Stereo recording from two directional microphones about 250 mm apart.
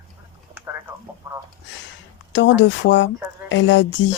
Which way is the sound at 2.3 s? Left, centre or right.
Left.